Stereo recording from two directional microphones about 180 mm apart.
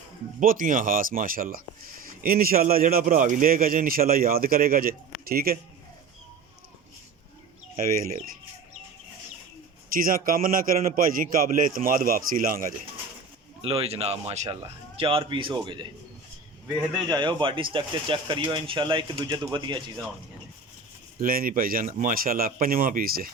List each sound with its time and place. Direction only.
0.3 s speech: 50° right (ahead or behind)
7.8 s speech: 50° right (ahead or behind)
9.9 s a man's voice: 50° right (ahead or behind)
13.6 s speech: 35° right (ahead or behind)
14.4 s speech: 25° right (ahead or behind)
17.1 s speech: 25° right (ahead or behind)
21.2 s speech: 50° right (ahead or behind)